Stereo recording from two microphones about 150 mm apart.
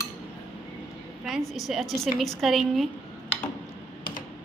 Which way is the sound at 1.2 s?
Centre (ahead or behind).